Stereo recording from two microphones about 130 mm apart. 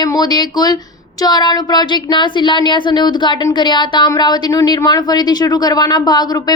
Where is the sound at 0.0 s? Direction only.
30° left (ahead or behind).